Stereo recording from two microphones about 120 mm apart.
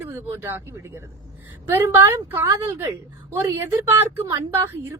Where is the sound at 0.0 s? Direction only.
20° right (ahead or behind).